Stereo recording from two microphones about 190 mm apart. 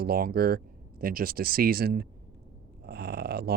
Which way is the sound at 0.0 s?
50° right (ahead or behind).